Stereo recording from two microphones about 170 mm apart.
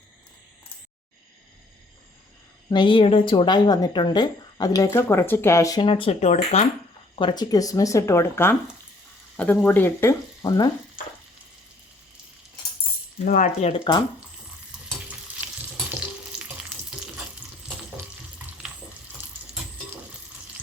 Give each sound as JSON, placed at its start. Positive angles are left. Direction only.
{"t": 2.6, "sound": "speech", "side_deg": 30}
{"t": 7.2, "sound": "speech", "side_deg": 25}
{"t": 13.2, "sound": "speech", "side_deg": 45}
{"t": 16.4, "sound": "frying", "side_deg": -5}